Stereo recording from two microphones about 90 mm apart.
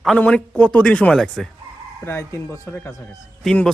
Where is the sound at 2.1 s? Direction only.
30° left (ahead or behind).